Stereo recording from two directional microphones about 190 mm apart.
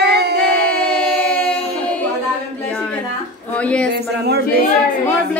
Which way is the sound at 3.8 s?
60° right (ahead or behind).